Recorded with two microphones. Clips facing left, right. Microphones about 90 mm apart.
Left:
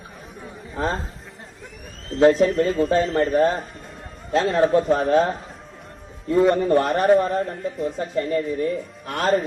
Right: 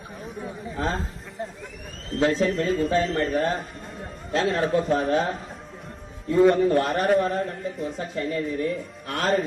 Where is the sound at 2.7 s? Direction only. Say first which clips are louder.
Left 3 dB; centre (ahead or behind).